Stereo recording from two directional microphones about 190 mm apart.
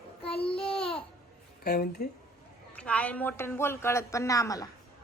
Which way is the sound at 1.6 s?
55° left (ahead or behind).